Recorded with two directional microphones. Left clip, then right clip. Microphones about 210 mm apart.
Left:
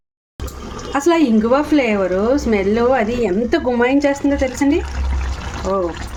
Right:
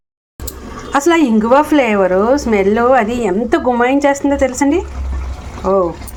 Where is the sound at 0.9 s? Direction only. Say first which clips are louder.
Right 3 dB; 5° right (ahead or behind).